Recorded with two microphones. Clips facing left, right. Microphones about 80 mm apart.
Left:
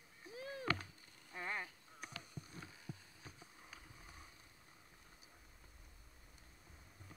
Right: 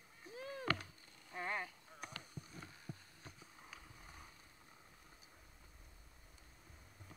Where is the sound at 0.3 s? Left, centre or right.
Right.